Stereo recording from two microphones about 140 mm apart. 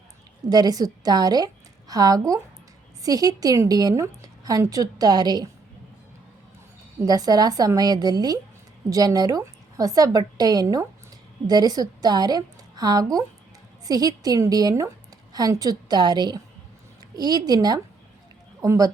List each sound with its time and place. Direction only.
0.5 s a woman's voice: 25° right (ahead or behind)
7.0 s a woman's voice: 25° right (ahead or behind)